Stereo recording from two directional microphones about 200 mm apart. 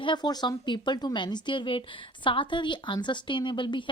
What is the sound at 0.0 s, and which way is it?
A woman's voice, 20° left (ahead or behind).